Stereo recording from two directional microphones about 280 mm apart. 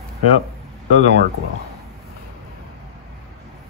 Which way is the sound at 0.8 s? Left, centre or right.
Right.